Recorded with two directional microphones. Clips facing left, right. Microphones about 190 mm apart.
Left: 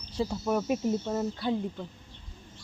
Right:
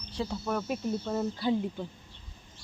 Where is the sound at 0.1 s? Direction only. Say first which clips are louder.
Left 3 dB; 10° left (ahead or behind).